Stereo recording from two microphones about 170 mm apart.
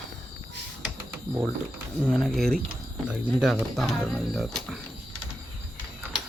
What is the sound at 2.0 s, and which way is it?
Speech, centre (ahead or behind).